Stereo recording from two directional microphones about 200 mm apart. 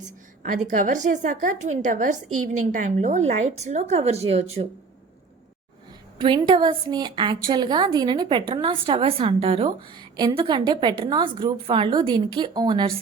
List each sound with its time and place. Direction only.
0.4 s a woman's voice: 40° right (ahead or behind)
6.1 s speech: 25° right (ahead or behind)